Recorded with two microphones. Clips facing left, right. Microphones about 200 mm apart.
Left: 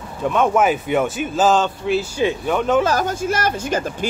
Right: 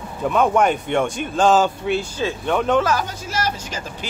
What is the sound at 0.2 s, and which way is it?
Speech, centre (ahead or behind).